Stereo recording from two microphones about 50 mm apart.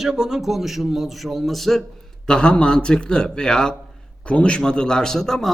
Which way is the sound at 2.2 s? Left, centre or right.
Centre.